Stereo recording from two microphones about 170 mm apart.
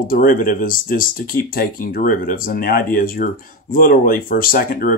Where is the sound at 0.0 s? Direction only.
55° left (ahead or behind).